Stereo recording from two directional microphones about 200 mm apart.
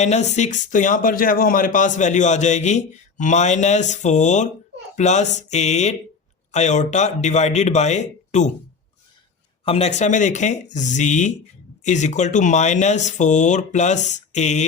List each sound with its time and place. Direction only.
0.0 s speech: 35° left (ahead or behind)
9.6 s speech: 30° left (ahead or behind)